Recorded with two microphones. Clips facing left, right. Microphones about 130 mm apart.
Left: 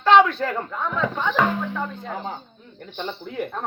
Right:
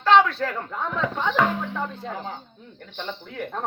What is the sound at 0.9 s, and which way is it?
Speech, 20° right (ahead or behind).